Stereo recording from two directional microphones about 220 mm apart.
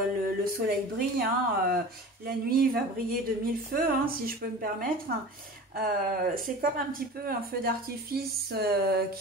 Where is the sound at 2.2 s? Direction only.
45° right (ahead or behind).